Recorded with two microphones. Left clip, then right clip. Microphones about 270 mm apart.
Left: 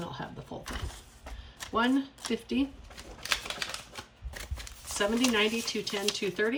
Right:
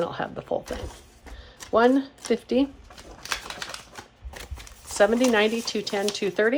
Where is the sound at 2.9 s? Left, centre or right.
Centre.